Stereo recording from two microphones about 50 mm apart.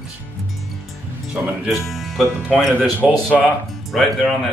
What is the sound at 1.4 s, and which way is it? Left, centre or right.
Speech, right.